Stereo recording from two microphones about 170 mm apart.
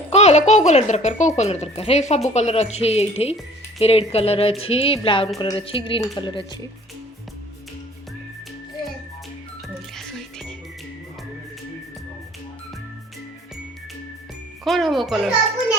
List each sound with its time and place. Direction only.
0.1 s a woman's voice: 40° left (ahead or behind)
9.9 s music: centre (ahead or behind)
14.6 s speech: centre (ahead or behind)